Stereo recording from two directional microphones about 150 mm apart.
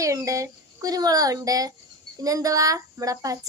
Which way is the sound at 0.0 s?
20° right (ahead or behind).